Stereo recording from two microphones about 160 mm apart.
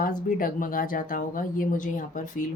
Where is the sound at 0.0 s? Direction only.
60° left (ahead or behind).